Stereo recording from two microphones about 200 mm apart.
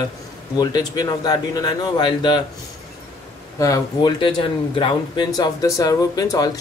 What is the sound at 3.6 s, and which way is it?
Speech, 20° left (ahead or behind).